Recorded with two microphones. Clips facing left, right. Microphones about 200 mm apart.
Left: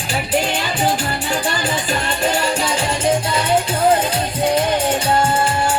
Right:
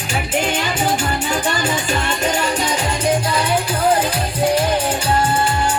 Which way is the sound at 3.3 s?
25° left (ahead or behind).